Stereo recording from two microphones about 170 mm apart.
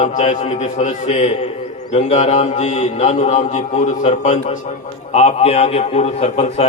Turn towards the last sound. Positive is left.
turn(degrees=40)  # may be behind; listen again after turning